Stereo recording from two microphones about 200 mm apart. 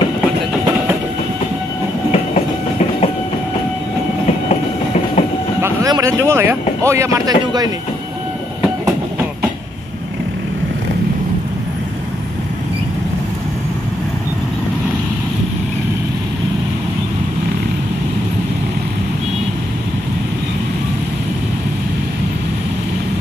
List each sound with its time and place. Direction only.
4.5 s train: 30° left (ahead or behind)
5.6 s speech: 15° right (ahead or behind)